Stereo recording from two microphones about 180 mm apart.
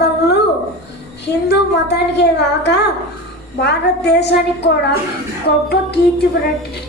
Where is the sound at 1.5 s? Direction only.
65° left (ahead or behind).